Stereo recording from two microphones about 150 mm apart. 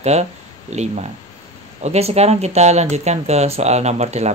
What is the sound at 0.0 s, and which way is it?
Speech, 45° right (ahead or behind).